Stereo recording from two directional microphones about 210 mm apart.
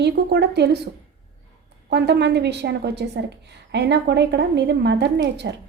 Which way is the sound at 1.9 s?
55° right (ahead or behind).